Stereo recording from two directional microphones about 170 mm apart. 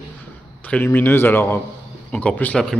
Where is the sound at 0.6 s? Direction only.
10° left (ahead or behind).